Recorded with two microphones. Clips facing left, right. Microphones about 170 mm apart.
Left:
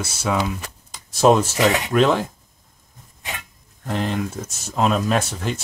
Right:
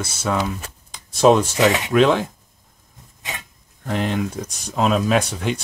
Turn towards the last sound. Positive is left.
turn(degrees=0)  # may be behind; listen again after turning